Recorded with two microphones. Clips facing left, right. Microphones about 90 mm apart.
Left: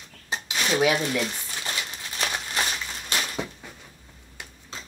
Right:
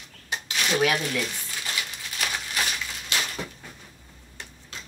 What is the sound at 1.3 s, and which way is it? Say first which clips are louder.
Crumpling: left 1 dB; 30° left (ahead or behind).